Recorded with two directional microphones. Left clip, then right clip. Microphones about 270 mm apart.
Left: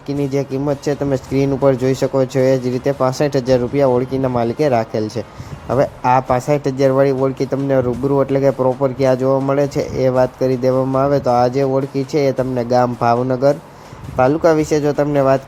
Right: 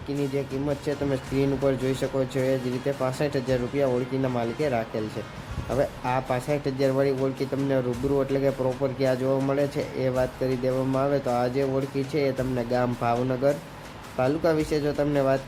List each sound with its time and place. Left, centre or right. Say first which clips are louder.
0.9 s speech: left 9 dB; left